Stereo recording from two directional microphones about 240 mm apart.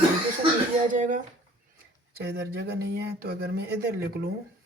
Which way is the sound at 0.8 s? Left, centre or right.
Right.